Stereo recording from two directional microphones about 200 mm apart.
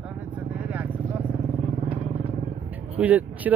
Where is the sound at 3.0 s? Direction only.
10° right (ahead or behind).